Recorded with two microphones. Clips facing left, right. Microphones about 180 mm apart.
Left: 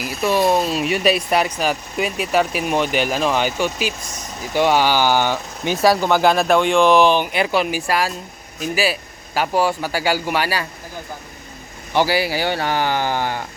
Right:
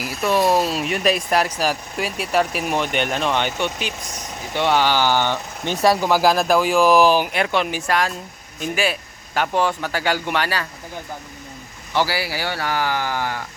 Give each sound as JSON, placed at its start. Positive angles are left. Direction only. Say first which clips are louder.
{"t": 0.0, "sound": "speech", "louder": "left 1 dB", "side_deg": 0}
{"t": 11.9, "sound": "speech", "louder": "left 4 dB", "side_deg": 20}